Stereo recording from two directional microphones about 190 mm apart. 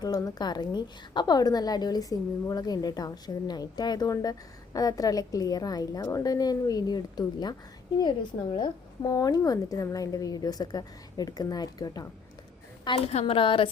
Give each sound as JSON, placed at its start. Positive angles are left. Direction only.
{"t": 0.0, "sound": "a woman's voice", "side_deg": 20}
{"t": 8.5, "sound": "a woman's voice", "side_deg": 20}